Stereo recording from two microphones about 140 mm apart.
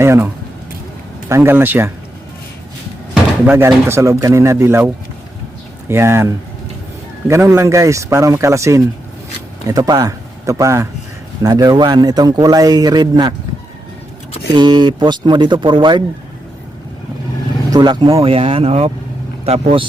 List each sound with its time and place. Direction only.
0.0 s speech: 20° right (ahead or behind)
1.3 s speech: 15° right (ahead or behind)
3.4 s speech: 15° right (ahead or behind)
5.9 s speech: 15° right (ahead or behind)
14.5 s speech: 30° right (ahead or behind)
17.7 s speech: 30° right (ahead or behind)